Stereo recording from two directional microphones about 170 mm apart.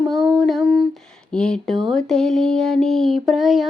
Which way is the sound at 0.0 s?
5° right (ahead or behind).